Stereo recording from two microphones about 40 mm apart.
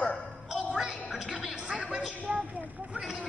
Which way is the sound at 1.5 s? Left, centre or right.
Right.